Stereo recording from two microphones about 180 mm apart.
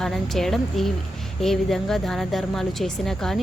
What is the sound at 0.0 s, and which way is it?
A woman's voice, centre (ahead or behind).